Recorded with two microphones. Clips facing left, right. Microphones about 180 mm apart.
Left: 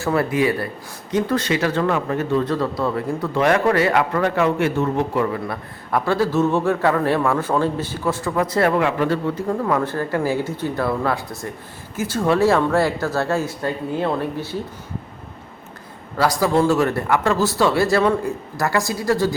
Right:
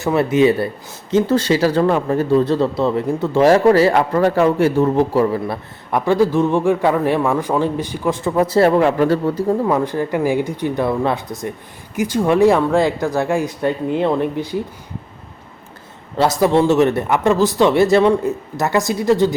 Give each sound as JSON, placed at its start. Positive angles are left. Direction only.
{"t": 0.0, "sound": "speech", "side_deg": -20}
{"t": 6.1, "sound": "a man's voice", "side_deg": -15}
{"t": 9.5, "sound": "a man's voice", "side_deg": -20}
{"t": 16.1, "sound": "speech", "side_deg": -25}